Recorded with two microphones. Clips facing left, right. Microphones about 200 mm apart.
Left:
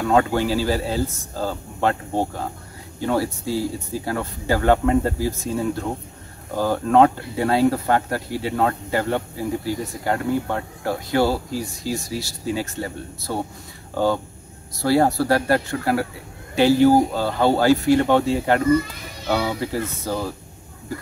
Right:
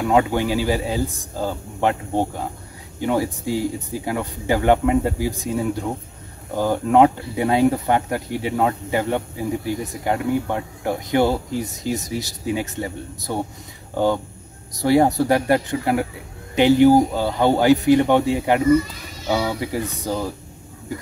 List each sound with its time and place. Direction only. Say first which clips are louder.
0.0 s speech: even; 15° right (ahead or behind)
14.8 s speech: right 2 dB; 20° right (ahead or behind)